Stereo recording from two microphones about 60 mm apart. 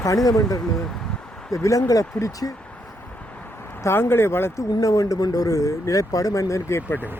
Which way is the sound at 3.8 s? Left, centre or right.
Left.